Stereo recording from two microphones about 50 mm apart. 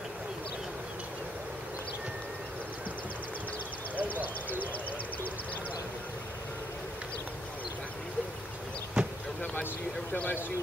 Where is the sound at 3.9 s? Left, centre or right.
Left.